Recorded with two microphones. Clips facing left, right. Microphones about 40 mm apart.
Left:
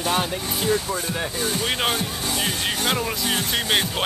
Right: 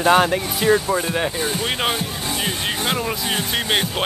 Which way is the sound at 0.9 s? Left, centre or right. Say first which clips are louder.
Right 6 dB; right.